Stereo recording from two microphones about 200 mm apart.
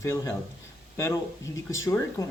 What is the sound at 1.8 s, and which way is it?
Speech, 15° left (ahead or behind).